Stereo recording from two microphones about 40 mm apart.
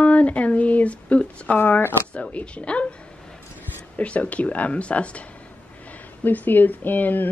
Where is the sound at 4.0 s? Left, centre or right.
Left.